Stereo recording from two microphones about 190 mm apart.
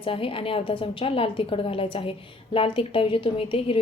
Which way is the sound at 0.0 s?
30° left (ahead or behind).